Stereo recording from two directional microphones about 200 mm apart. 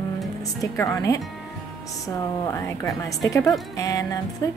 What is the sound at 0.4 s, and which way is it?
Speech, 15° left (ahead or behind).